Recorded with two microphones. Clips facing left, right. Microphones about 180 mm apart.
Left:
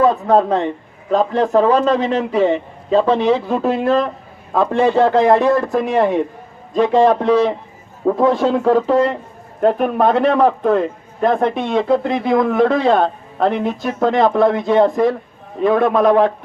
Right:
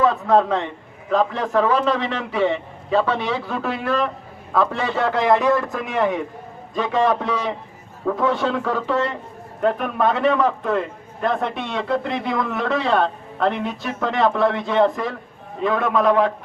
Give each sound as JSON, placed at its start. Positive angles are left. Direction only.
{"t": 0.0, "sound": "a man's voice", "side_deg": 35}